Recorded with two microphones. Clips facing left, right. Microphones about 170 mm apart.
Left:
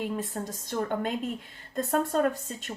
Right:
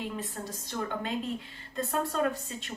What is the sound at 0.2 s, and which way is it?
A woman's voice, 45° left (ahead or behind).